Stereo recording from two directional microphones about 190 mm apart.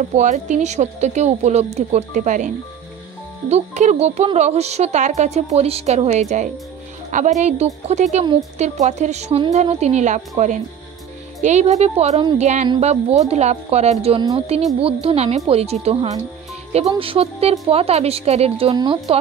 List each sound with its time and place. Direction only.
0.1 s a woman's voice: 40° right (ahead or behind)